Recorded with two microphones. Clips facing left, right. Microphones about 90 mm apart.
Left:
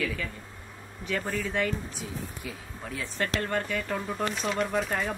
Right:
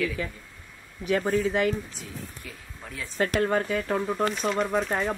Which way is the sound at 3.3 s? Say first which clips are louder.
Right 6 dB; 15° right (ahead or behind).